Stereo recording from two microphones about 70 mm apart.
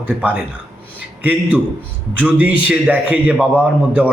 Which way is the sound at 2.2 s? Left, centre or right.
Right.